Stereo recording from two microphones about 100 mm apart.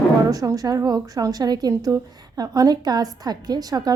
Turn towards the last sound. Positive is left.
turn(degrees=-40)  # may be behind; listen again after turning